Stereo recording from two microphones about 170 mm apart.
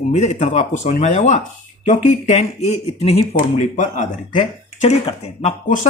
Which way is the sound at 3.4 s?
50° left (ahead or behind).